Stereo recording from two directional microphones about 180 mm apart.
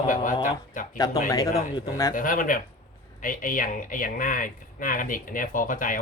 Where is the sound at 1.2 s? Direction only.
15° left (ahead or behind).